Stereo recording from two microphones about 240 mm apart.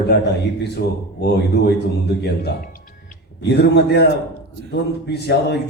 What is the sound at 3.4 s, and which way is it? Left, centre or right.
Speech, left.